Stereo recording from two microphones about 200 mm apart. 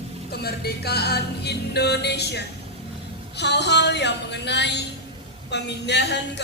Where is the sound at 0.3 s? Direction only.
50° left (ahead or behind).